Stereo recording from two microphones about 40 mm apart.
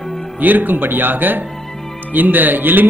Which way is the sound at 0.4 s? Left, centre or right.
Right.